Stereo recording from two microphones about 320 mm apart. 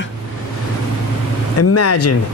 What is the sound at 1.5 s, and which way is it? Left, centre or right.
Speech, left.